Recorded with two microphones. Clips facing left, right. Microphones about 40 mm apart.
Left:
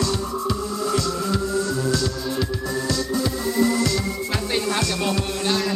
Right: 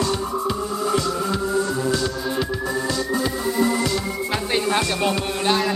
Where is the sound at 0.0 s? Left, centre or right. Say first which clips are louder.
Right 2 dB; right.